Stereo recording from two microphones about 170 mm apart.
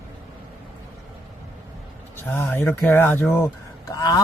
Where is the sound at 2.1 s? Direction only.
10° left (ahead or behind).